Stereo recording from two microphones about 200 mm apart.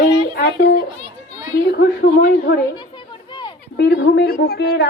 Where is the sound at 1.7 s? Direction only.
55° left (ahead or behind).